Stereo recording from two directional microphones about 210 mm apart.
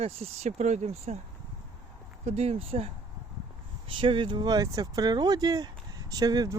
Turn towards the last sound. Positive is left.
turn(degrees=-20)  # may be behind; listen again after turning